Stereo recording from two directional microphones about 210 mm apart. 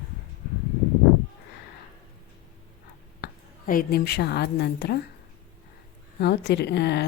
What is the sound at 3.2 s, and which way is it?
A woman's voice, 45° left (ahead or behind).